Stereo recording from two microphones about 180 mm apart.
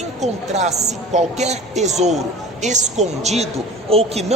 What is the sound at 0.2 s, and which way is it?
A woman's voice, 40° right (ahead or behind).